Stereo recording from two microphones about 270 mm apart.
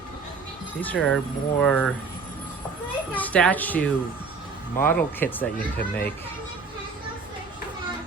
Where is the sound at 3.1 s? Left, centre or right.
Centre.